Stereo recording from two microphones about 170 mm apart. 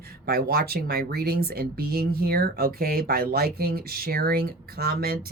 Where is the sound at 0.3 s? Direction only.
60° right (ahead or behind).